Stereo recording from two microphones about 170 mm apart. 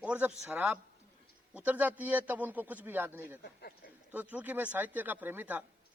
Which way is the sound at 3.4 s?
70° left (ahead or behind).